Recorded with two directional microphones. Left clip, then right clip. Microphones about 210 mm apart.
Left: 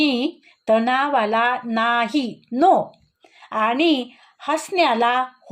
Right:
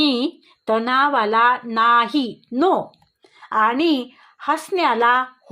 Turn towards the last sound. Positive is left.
turn(degrees=-20)  # may be behind; listen again after turning